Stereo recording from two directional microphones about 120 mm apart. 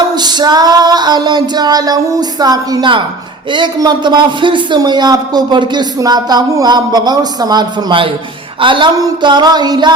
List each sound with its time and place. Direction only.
0.2 s a man's voice: 35° right (ahead or behind)